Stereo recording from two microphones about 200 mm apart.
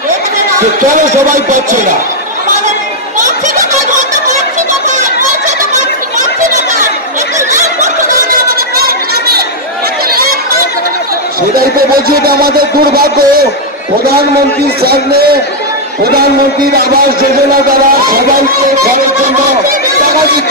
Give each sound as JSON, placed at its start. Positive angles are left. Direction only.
{"t": 1.3, "sound": "speech", "side_deg": -40}
{"t": 6.1, "sound": "chatter", "side_deg": -40}
{"t": 7.8, "sound": "a sound", "side_deg": -45}
{"t": 11.5, "sound": "speech", "side_deg": -50}
{"t": 17.6, "sound": "speech", "side_deg": -45}